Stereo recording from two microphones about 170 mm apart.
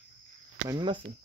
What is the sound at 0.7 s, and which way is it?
Speech, 25° right (ahead or behind).